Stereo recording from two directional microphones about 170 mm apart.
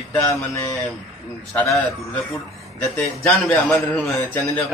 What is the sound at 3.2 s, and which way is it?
A man's voice, 10° left (ahead or behind).